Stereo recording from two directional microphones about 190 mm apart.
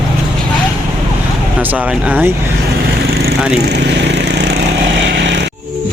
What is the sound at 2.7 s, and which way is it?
Vehicle, 55° right (ahead or behind).